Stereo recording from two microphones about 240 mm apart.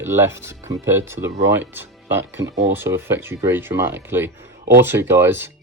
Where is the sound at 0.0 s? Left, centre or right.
Centre.